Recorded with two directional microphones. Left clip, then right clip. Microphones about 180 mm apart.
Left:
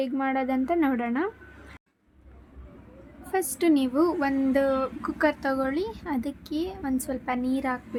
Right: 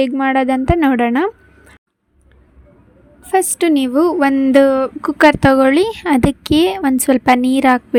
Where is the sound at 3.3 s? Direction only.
40° right (ahead or behind).